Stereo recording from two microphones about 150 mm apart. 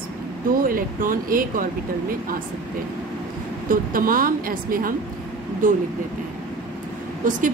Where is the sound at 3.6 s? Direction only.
70° right (ahead or behind).